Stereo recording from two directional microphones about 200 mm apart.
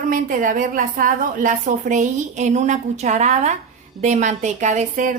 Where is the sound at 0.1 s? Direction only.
40° right (ahead or behind).